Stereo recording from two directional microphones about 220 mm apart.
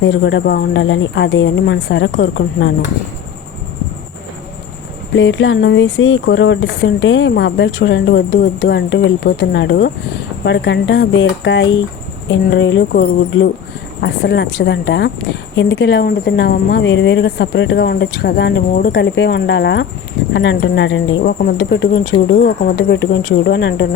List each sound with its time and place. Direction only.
0.0 s speech: 55° left (ahead or behind)
5.1 s speech: 60° left (ahead or behind)